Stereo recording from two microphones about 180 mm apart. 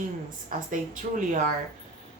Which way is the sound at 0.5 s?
50° right (ahead or behind).